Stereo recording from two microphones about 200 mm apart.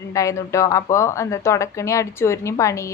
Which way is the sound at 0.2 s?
15° left (ahead or behind).